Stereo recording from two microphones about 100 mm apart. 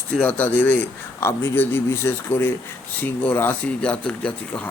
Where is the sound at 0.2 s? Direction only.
15° left (ahead or behind).